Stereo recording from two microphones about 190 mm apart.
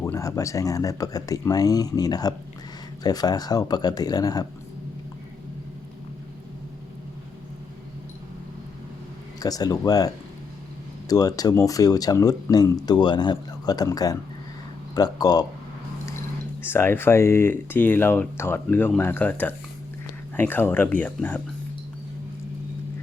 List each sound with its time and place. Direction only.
0.0 s speech: 15° left (ahead or behind)
9.4 s speech: 20° left (ahead or behind)
11.1 s speech: 20° left (ahead or behind)
16.6 s speech: 10° left (ahead or behind)